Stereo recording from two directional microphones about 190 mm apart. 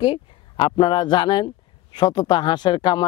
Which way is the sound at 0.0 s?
25° left (ahead or behind).